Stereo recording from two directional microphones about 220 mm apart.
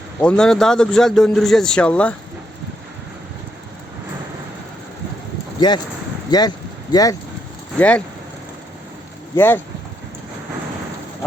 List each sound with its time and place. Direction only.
0.2 s a man's voice: 5° left (ahead or behind)
5.5 s a man's voice: 20° left (ahead or behind)
9.3 s speech: 10° left (ahead or behind)